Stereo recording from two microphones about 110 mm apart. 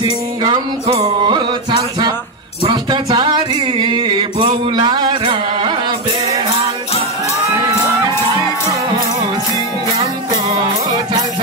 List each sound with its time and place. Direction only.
0.0 s music: 40° right (ahead or behind)
0.8 s music: 55° right (ahead or behind)